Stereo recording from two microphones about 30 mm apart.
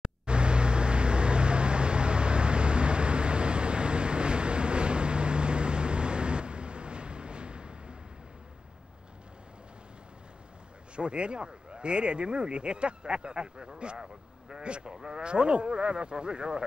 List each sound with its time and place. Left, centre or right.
0.0 s vehicle: right
11.0 s speech: right